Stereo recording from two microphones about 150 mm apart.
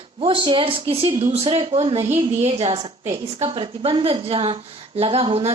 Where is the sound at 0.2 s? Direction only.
35° right (ahead or behind).